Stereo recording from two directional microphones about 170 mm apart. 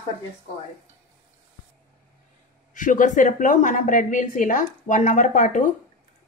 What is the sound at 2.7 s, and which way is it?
A woman's voice, 50° left (ahead or behind).